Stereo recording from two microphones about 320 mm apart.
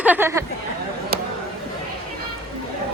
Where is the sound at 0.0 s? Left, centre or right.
Centre.